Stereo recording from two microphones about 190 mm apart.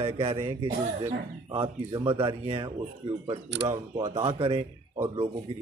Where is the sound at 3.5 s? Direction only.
70° right (ahead or behind).